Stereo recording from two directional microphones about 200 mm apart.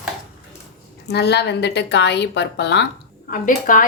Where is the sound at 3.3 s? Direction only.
40° left (ahead or behind).